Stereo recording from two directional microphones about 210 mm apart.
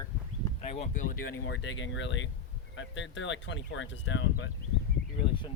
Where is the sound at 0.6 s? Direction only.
30° left (ahead or behind).